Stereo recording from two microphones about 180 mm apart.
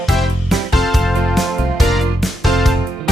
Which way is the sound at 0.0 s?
Centre (ahead or behind).